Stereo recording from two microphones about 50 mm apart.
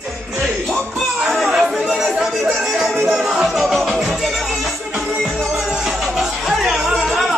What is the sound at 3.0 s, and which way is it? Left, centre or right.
Music, centre.